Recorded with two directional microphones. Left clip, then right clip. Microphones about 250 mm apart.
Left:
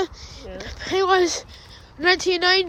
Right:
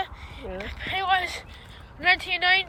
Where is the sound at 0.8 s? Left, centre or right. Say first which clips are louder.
Left 6 dB; centre.